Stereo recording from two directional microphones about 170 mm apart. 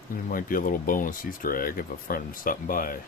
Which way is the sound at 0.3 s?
55° left (ahead or behind).